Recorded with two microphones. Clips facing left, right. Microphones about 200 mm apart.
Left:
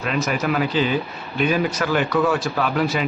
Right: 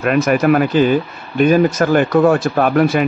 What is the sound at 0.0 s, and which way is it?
Speech, 55° right (ahead or behind).